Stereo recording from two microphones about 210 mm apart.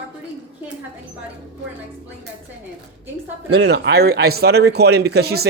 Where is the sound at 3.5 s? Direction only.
55° right (ahead or behind).